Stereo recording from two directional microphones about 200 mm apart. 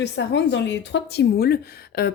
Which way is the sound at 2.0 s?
50° left (ahead or behind).